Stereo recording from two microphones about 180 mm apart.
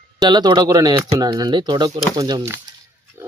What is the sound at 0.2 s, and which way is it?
Speech, 25° right (ahead or behind).